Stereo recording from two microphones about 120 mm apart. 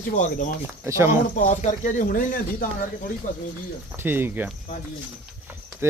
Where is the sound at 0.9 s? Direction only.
25° right (ahead or behind).